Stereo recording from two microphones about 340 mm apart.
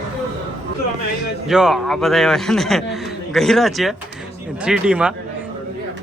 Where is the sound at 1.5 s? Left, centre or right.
Centre.